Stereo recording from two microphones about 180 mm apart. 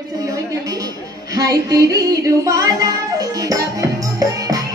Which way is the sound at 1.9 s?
15° right (ahead or behind).